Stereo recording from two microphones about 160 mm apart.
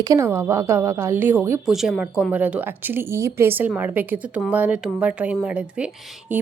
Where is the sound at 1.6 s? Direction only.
Centre (ahead or behind).